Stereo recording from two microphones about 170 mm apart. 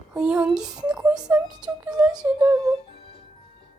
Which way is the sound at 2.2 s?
20° right (ahead or behind).